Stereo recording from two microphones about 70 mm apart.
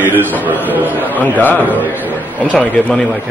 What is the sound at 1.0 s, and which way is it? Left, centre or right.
A man's voice, left.